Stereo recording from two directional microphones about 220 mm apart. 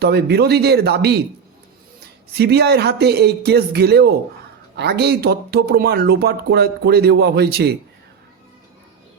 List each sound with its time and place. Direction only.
0.0 s speech: 45° right (ahead or behind)
2.3 s speech: 45° right (ahead or behind)